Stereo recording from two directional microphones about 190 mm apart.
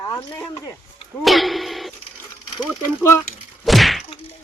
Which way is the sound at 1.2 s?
Centre (ahead or behind).